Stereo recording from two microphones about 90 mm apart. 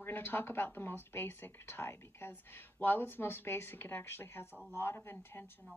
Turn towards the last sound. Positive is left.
turn(degrees=25)  # may be behind; listen again after turning